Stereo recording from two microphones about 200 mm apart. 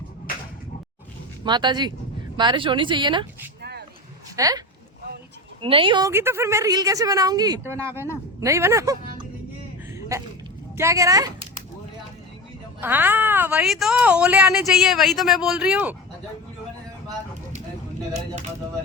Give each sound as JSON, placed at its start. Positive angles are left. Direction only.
{"t": 1.5, "sound": "speech", "side_deg": -20}
{"t": 3.6, "sound": "a sound", "side_deg": -55}
{"t": 4.4, "sound": "speech", "side_deg": -15}
{"t": 5.6, "sound": "a woman's voice", "side_deg": -25}
{"t": 9.9, "sound": "a sound", "side_deg": -15}
{"t": 10.8, "sound": "a woman's voice", "side_deg": -15}
{"t": 12.8, "sound": "speech", "side_deg": -10}